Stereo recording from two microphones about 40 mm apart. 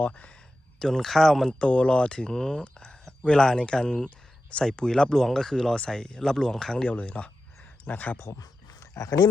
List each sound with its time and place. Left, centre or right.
0.8 s speech: centre
1.5 s speech: left
6.8 s speech: left
7.9 s speech: left